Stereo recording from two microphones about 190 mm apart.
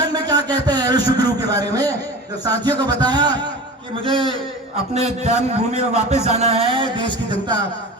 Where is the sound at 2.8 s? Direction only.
20° right (ahead or behind).